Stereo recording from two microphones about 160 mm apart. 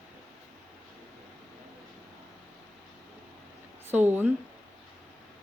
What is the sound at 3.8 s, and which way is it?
Speech, 10° right (ahead or behind).